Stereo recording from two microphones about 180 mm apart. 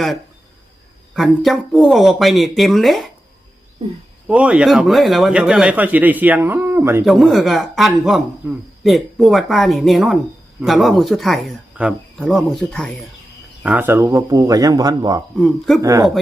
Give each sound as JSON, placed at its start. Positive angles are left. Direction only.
{"t": 1.1, "sound": "speech", "side_deg": 0}
{"t": 4.3, "sound": "a man's voice", "side_deg": -5}
{"t": 7.0, "sound": "speech", "side_deg": 0}
{"t": 13.6, "sound": "speech", "side_deg": -10}
{"t": 15.4, "sound": "speech", "side_deg": 0}
{"t": 15.8, "sound": "speech", "side_deg": -20}